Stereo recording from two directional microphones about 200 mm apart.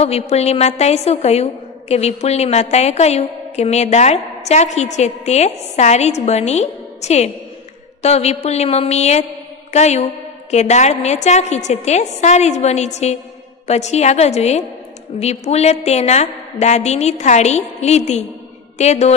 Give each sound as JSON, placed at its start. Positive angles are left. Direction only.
{"t": 0.0, "sound": "a woman's voice", "side_deg": 30}
{"t": 9.7, "sound": "mantra", "side_deg": 35}
{"t": 10.5, "sound": "a woman's voice", "side_deg": 35}